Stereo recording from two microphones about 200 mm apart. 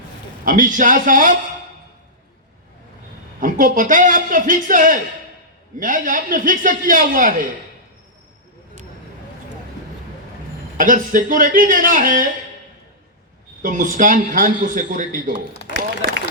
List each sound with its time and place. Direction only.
0.4 s a man's voice: 40° right (ahead or behind)
3.4 s a man's voice: 40° right (ahead or behind)
10.8 s a man's voice: 40° right (ahead or behind)
13.6 s a man's voice: 40° right (ahead or behind)